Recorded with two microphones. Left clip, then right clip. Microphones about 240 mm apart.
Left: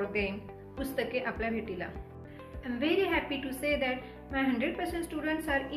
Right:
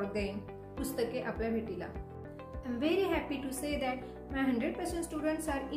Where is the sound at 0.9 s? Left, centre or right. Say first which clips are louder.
Left 3 dB; centre.